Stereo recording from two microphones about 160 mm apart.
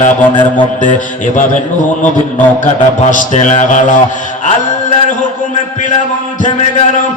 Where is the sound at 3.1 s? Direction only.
50° left (ahead or behind).